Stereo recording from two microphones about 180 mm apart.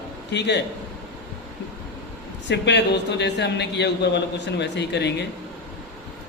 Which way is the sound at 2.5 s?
75° left (ahead or behind).